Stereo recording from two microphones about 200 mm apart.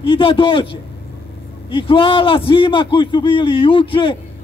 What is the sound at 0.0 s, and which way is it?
A man's voice, 25° left (ahead or behind).